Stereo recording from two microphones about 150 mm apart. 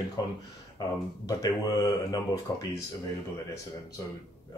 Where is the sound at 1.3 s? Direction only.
25° left (ahead or behind).